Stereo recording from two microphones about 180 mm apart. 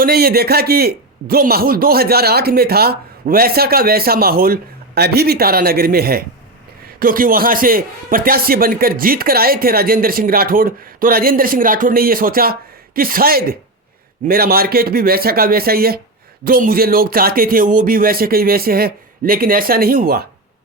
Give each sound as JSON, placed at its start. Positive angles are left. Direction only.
{"t": 0.0, "sound": "a man's voice", "side_deg": -60}